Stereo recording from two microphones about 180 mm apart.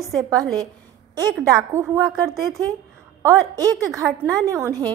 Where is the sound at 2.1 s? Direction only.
Centre (ahead or behind).